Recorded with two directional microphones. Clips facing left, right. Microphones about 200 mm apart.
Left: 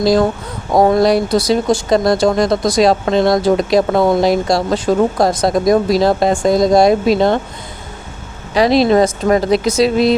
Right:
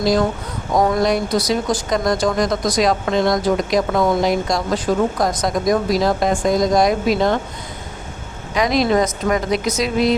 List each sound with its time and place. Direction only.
0.0 s speech: 30° left (ahead or behind)
8.5 s speech: 30° left (ahead or behind)